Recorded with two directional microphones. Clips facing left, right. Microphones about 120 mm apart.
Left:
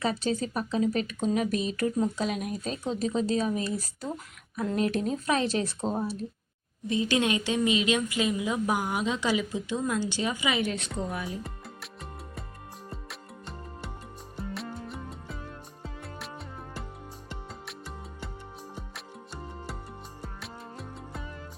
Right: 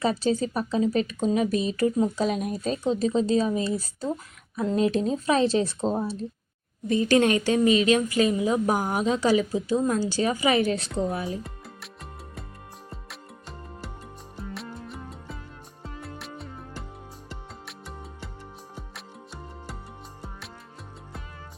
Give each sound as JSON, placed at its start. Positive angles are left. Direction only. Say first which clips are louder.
{"t": 0.0, "sound": "speech", "louder": "right 4 dB", "side_deg": -35}
{"t": 6.8, "sound": "speech", "louder": "right 6 dB", "side_deg": -45}
{"t": 11.4, "sound": "music", "louder": "even", "side_deg": 0}